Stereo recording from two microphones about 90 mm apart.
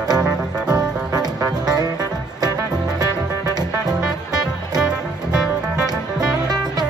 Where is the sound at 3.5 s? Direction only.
50° right (ahead or behind).